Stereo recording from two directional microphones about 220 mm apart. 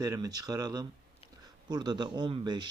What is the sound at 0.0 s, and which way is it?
Speech, 15° right (ahead or behind).